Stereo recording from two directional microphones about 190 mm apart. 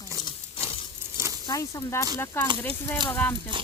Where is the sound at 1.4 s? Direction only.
15° left (ahead or behind).